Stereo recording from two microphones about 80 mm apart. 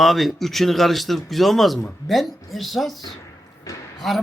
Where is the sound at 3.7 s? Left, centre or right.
Left.